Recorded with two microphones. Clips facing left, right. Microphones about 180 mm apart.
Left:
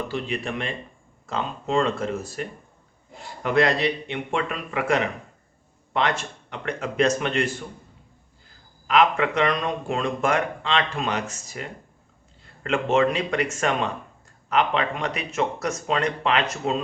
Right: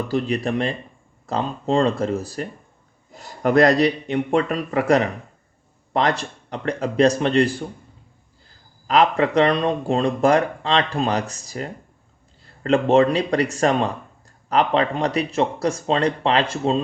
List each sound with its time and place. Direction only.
0.1 s speech: 40° right (ahead or behind)
8.9 s speech: 35° right (ahead or behind)